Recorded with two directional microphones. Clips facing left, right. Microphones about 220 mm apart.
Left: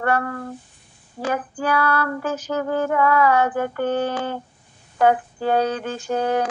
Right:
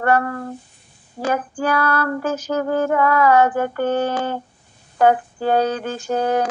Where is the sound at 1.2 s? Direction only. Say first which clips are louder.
Right 3 dB; 40° right (ahead or behind).